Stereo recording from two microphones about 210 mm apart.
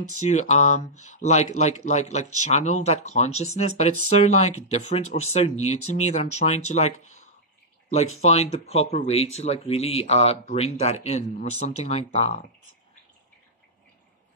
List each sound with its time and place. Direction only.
0.2 s speech: 35° left (ahead or behind)
8.2 s speech: 30° left (ahead or behind)